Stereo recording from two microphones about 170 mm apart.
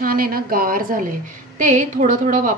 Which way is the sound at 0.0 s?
60° right (ahead or behind).